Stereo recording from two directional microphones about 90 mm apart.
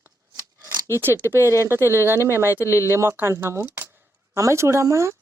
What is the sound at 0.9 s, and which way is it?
Speech, 30° right (ahead or behind).